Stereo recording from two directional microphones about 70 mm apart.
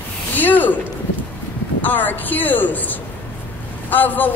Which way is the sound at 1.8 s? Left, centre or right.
Left.